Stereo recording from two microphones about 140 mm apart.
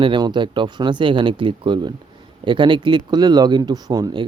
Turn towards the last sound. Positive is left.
turn(degrees=-30)  # may be behind; listen again after turning